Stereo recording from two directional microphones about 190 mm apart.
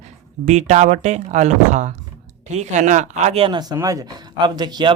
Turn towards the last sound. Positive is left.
turn(degrees=-20)  # may be behind; listen again after turning